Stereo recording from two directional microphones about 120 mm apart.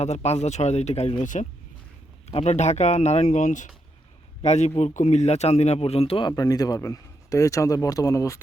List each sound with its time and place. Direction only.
0.0 s speech: 65° left (ahead or behind); by 1.5 s 90° left
2.2 s speech: 65° left (ahead or behind); by 3.7 s 90° left
4.4 s speech: 65° left (ahead or behind); by 6.3 s 50° left (ahead or behind)
6.3 s a man's voice: 30° left (ahead or behind)